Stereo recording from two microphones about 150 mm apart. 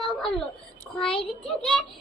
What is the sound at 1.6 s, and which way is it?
Speech, 5° left (ahead or behind).